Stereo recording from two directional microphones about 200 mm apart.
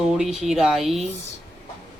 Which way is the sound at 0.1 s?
Centre (ahead or behind).